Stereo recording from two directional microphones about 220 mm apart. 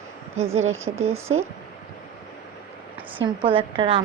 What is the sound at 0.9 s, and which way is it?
Speech, 25° right (ahead or behind).